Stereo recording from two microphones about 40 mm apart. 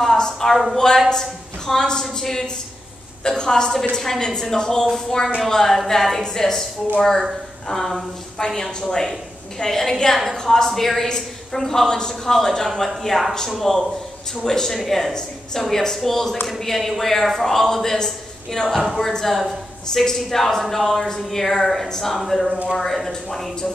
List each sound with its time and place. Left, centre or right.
0.0 s a sound: centre
0.7 s a woman's voice: centre
9.6 s a woman's voice: centre